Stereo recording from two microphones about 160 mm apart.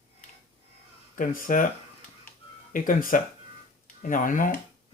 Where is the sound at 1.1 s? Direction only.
60° left (ahead or behind).